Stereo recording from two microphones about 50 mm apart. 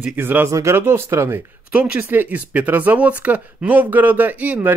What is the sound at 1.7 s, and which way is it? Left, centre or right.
Speech, right.